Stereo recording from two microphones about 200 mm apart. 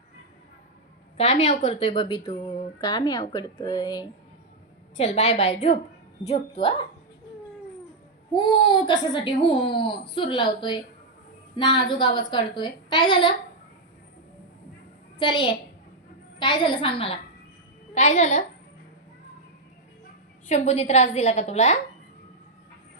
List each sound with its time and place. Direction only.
1.1 s a child's voice: 35° left (ahead or behind)
4.9 s a woman's voice: 35° left (ahead or behind)
8.3 s a child's voice: 20° left (ahead or behind)
15.2 s a child's voice: 25° left (ahead or behind); by 18.4 s 40° left (ahead or behind)
20.5 s a woman's voice: 35° left (ahead or behind)